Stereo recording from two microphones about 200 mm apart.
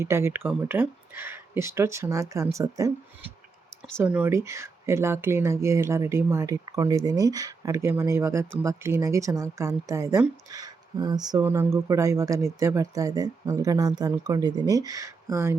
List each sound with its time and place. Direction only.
0.0 s speech: 15° right (ahead or behind)